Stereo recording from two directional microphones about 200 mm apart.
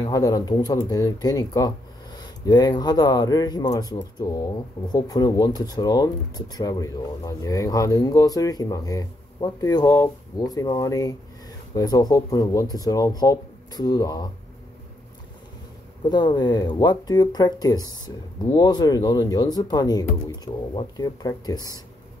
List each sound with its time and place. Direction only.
0.0 s speech: 15° left (ahead or behind)
16.1 s speech: 20° left (ahead or behind)